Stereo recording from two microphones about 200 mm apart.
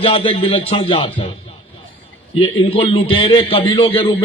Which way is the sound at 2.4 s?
30° left (ahead or behind).